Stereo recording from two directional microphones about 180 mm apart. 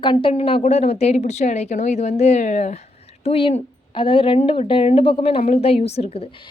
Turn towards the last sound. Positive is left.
turn(degrees=35)  # may be behind; listen again after turning